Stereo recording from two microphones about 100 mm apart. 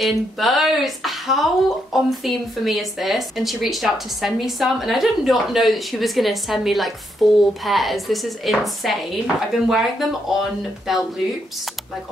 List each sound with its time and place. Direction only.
0.0 s speech: centre (ahead or behind)